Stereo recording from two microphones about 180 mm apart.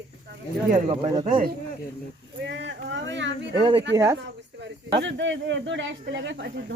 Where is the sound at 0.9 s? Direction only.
35° right (ahead or behind).